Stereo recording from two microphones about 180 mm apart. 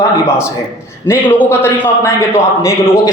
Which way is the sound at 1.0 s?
15° left (ahead or behind).